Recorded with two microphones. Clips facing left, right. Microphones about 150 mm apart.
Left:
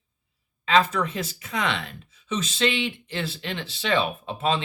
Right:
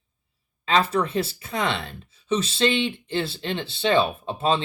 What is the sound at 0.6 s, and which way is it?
Speech, 35° right (ahead or behind).